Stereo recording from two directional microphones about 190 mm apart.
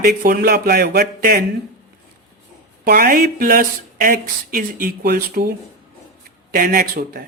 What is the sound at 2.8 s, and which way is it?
Speech, 45° right (ahead or behind).